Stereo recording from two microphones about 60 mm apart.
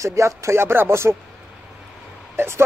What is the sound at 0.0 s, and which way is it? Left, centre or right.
Speech, right.